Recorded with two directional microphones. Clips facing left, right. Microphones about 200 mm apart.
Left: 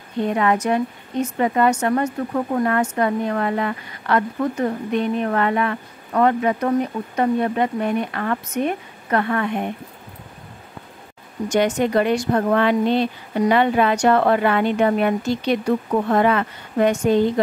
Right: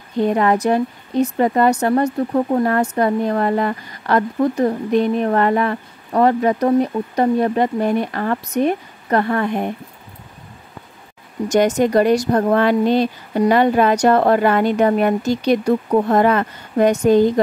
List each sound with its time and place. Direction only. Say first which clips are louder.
0.2 s a woman's voice: right 3 dB; 35° right (ahead or behind)
11.4 s a woman's voice: right 4 dB; 40° right (ahead or behind)